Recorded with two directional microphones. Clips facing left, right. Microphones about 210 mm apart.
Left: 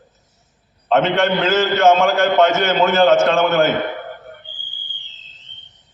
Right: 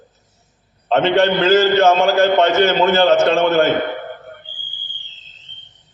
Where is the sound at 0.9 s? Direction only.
35° right (ahead or behind).